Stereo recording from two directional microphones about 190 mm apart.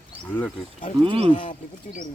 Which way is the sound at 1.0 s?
30° right (ahead or behind).